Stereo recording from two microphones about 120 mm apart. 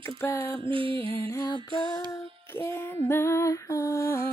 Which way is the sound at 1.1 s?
25° left (ahead or behind).